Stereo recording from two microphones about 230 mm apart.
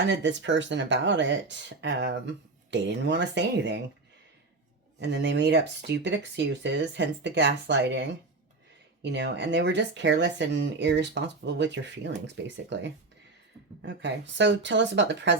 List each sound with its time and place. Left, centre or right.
0.1 s speech: right
4.9 s speech: right
13.8 s speech: right